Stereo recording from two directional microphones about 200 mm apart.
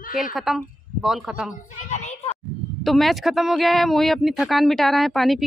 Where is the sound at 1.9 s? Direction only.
35° left (ahead or behind).